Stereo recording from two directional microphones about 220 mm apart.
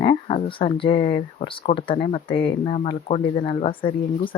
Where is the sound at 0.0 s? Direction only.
25° left (ahead or behind).